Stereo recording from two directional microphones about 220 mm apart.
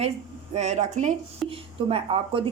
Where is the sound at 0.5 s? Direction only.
30° right (ahead or behind).